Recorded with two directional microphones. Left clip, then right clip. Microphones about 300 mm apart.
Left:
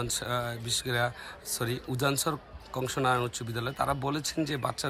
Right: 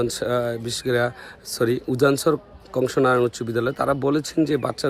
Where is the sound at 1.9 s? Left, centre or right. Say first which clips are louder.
Right 11 dB; left.